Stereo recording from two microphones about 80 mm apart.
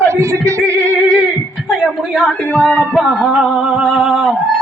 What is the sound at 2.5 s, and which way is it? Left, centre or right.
Speech, centre.